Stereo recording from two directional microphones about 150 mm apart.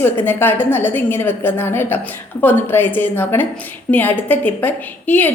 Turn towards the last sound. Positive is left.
turn(degrees=10)  # may be behind; listen again after turning